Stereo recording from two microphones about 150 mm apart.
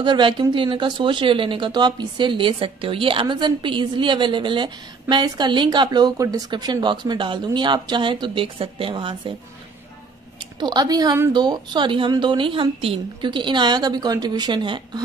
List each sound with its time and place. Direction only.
0.0 s speech: 30° right (ahead or behind)
10.6 s a woman's voice: 30° right (ahead or behind)